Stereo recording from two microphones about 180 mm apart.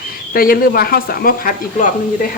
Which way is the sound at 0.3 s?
55° left (ahead or behind).